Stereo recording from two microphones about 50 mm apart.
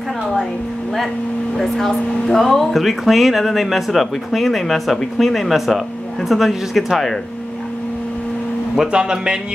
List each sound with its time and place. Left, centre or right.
1.6 s speech: centre
8.9 s speech: centre